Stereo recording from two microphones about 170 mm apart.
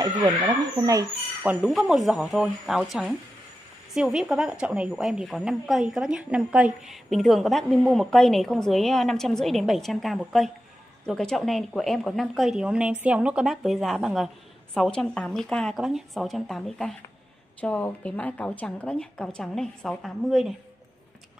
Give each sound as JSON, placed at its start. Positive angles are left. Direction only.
{"t": 0.0, "sound": "speech", "side_deg": -20}
{"t": 1.4, "sound": "a woman's voice", "side_deg": -5}